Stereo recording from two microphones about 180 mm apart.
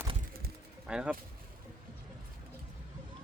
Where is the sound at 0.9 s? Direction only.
5° right (ahead or behind).